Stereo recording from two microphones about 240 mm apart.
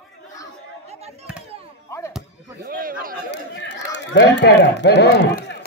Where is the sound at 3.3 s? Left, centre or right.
Left.